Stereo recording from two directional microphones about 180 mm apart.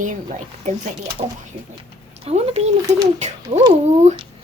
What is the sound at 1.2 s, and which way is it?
Speech, 35° right (ahead or behind).